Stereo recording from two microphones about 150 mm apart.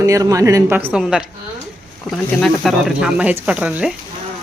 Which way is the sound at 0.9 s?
5° right (ahead or behind).